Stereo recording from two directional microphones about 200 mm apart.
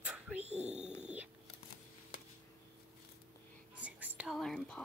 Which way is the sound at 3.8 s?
5° right (ahead or behind).